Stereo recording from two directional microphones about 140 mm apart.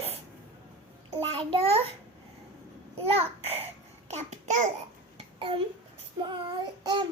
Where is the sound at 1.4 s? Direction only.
40° right (ahead or behind).